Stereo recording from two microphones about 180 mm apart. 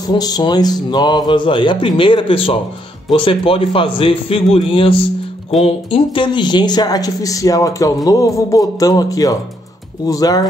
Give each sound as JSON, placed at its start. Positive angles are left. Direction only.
{"t": 0.1, "sound": "speech", "side_deg": 25}